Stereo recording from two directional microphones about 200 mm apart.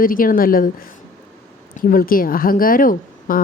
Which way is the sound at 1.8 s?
45° left (ahead or behind).